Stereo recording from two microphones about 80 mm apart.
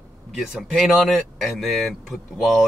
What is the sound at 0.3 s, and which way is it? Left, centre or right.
Speech, centre.